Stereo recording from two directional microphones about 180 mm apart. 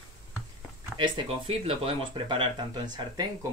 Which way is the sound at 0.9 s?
30° right (ahead or behind).